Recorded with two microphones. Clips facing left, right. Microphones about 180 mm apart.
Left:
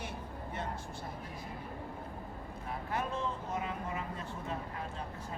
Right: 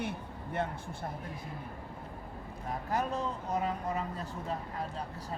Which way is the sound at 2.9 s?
40° right (ahead or behind).